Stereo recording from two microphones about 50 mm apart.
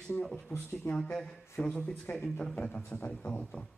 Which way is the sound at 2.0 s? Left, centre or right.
Left.